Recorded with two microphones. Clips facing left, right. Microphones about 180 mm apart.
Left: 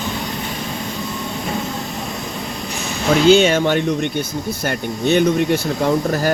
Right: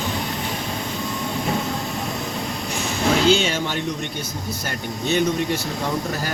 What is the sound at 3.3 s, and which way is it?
Speech, 55° left (ahead or behind).